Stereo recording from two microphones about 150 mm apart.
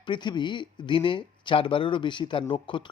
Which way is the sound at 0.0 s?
30° left (ahead or behind).